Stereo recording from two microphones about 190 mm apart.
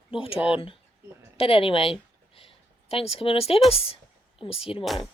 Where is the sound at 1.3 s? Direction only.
30° left (ahead or behind).